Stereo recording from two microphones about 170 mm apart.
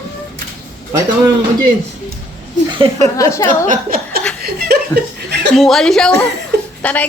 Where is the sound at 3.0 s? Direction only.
20° left (ahead or behind).